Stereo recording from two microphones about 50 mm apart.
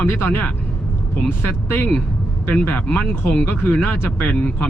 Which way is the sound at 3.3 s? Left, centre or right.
Left.